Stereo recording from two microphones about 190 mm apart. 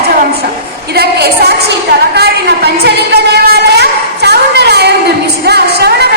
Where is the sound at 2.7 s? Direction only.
55° right (ahead or behind).